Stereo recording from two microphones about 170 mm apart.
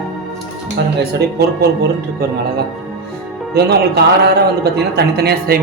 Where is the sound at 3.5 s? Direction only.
75° right (ahead or behind).